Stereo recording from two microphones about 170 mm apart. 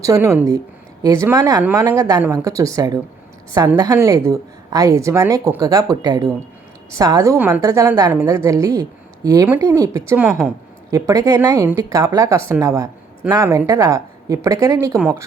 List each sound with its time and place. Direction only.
0.0 s a woman's voice: 15° right (ahead or behind)
10.1 s a woman's voice: 10° right (ahead or behind)
10.9 s speech: 20° right (ahead or behind)